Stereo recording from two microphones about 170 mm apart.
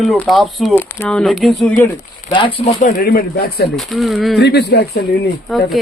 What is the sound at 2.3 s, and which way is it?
Speech, 30° left (ahead or behind).